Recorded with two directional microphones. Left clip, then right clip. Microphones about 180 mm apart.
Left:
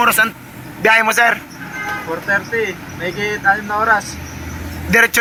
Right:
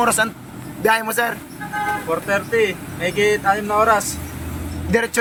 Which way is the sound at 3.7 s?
30° right (ahead or behind).